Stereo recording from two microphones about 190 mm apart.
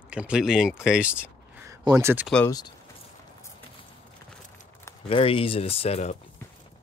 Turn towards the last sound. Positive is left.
turn(degrees=35)  # may be behind; listen again after turning